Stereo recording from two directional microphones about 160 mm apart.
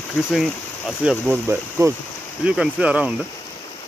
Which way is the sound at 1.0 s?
Centre (ahead or behind).